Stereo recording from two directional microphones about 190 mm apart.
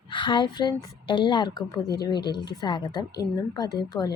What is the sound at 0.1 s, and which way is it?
A woman's voice, 25° left (ahead or behind).